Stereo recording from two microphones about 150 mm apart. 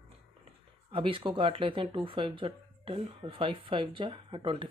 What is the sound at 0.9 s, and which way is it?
Speech, 35° right (ahead or behind).